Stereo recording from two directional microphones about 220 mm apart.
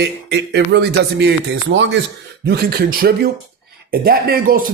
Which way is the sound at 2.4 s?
45° right (ahead or behind).